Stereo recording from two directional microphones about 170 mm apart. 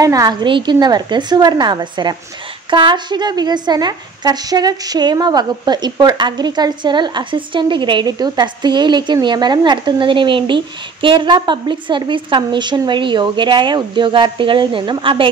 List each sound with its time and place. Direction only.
0.0 s a woman's voice: 20° right (ahead or behind)